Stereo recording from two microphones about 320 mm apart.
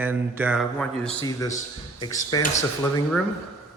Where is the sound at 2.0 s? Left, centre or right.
Centre.